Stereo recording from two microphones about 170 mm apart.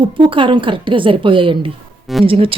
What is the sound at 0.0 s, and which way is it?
A woman's voice, 30° right (ahead or behind).